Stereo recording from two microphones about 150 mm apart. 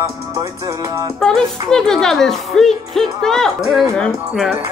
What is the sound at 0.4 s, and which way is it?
Music, 20° right (ahead or behind).